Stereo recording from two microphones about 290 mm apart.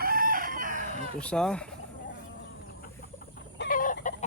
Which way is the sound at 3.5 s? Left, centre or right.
Left.